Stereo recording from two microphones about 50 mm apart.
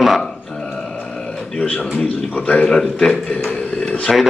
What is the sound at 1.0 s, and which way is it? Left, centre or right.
Grunt, centre.